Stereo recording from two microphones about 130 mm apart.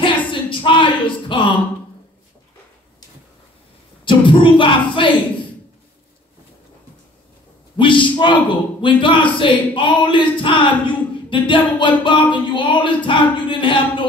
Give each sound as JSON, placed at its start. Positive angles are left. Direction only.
{"t": 0.0, "sound": "a sound", "side_deg": 40}
{"t": 4.0, "sound": "speech", "side_deg": 40}
{"t": 7.7, "sound": "speech", "side_deg": 40}